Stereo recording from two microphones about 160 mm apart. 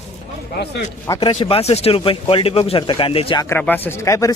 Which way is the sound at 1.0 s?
25° left (ahead or behind).